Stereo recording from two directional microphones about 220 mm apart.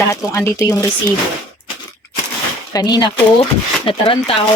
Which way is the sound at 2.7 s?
20° left (ahead or behind).